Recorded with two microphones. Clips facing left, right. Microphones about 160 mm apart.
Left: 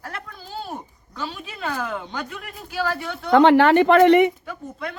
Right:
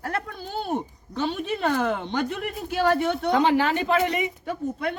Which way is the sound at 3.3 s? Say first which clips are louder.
Left 9 dB; 65° left (ahead or behind).